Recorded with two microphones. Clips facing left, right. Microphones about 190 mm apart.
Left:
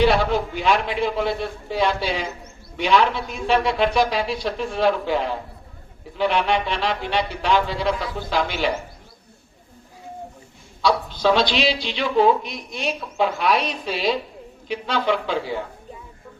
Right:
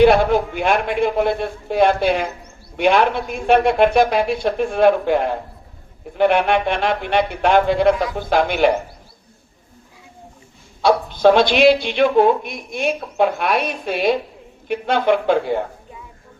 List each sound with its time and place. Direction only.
0.0 s a man's voice: 55° right (ahead or behind)
10.8 s speech: 55° right (ahead or behind)